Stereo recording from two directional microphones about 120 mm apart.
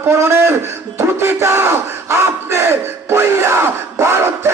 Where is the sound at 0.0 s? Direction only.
20° right (ahead or behind).